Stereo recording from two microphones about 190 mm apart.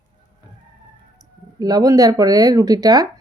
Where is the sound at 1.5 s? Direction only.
20° right (ahead or behind).